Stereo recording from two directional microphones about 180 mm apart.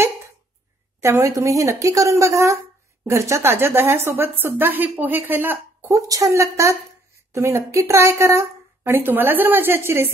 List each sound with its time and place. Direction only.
1.0 s speech: 15° right (ahead or behind)